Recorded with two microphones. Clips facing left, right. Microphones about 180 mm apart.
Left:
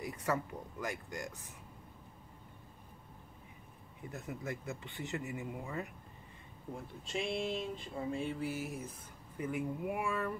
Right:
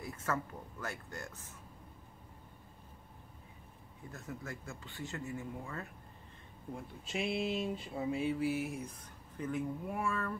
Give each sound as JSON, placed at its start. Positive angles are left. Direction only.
{"t": 0.0, "sound": "speech", "side_deg": 15}
{"t": 4.1, "sound": "speech", "side_deg": 20}
{"t": 7.1, "sound": "a sound", "side_deg": -5}
{"t": 9.4, "sound": "speech", "side_deg": 10}